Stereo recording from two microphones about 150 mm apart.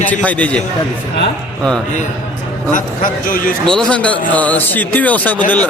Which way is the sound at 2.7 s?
65° left (ahead or behind).